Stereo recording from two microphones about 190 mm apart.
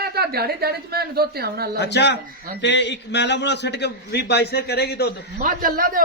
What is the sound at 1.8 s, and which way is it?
A man's voice, 65° left (ahead or behind).